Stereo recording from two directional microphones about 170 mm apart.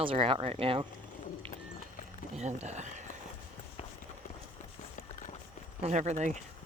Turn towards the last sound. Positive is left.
turn(degrees=-45)  # may be behind; listen again after turning